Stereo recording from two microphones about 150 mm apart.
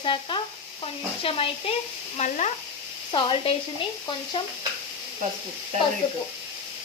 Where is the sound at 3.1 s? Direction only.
35° left (ahead or behind).